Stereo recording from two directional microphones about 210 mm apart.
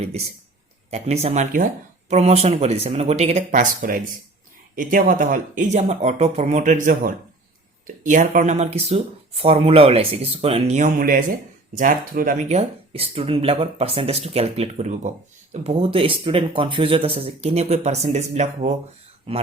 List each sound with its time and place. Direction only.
0.9 s speech: 30° right (ahead or behind)